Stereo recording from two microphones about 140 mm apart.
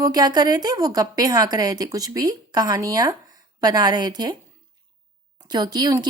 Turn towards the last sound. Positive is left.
turn(degrees=-30)  # may be behind; listen again after turning